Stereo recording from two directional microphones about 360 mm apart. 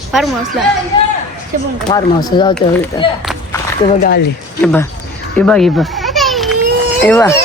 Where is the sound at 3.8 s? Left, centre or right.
Left.